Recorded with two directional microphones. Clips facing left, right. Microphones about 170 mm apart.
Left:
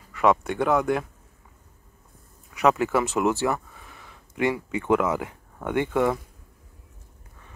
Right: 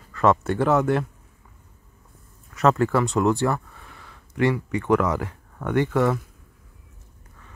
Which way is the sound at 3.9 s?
20° left (ahead or behind).